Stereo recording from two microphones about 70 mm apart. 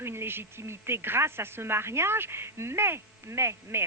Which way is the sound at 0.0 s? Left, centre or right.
Right.